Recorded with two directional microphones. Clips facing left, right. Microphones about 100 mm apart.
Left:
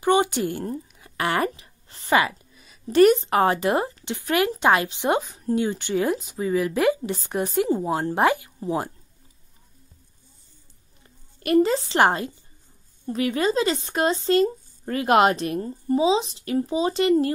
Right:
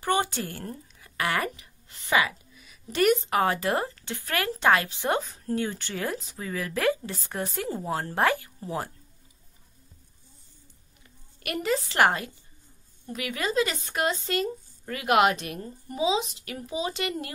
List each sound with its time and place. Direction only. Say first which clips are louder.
0.0 s speech: left 6 dB; 20° left (ahead or behind)
3.5 s a woman's voice: left 5 dB; 20° left (ahead or behind)
11.3 s a woman's voice: left 9 dB; 30° left (ahead or behind)